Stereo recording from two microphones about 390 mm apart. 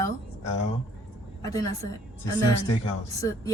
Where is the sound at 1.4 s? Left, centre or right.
Centre.